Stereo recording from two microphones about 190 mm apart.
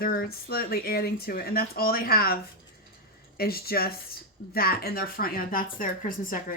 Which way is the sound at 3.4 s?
55° left (ahead or behind).